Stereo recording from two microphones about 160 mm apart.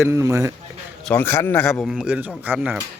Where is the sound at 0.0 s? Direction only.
15° right (ahead or behind).